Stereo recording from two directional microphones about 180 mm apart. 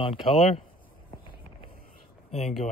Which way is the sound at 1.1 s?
25° left (ahead or behind).